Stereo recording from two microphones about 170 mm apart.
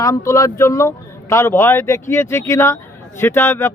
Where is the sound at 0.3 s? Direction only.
20° left (ahead or behind).